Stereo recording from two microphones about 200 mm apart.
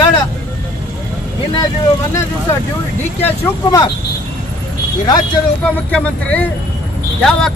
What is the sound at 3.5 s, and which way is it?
Speech, 10° left (ahead or behind).